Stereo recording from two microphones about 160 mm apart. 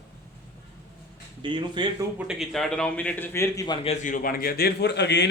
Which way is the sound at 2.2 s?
5° right (ahead or behind).